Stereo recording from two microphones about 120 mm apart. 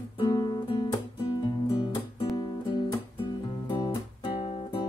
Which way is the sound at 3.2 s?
45° left (ahead or behind).